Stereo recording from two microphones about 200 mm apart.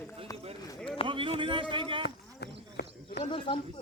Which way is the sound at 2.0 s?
55° left (ahead or behind).